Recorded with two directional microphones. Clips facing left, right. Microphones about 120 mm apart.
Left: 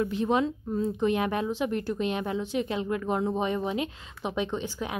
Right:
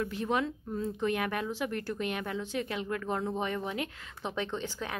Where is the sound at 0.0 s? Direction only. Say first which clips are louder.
Left 5 dB; 20° left (ahead or behind).